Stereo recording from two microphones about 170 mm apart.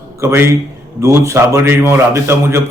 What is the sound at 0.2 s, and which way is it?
A man's voice, 15° right (ahead or behind).